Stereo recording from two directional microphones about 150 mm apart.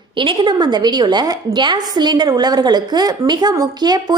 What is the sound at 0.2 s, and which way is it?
A woman's voice, 35° right (ahead or behind).